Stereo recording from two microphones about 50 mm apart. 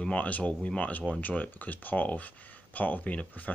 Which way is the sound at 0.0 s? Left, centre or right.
Left.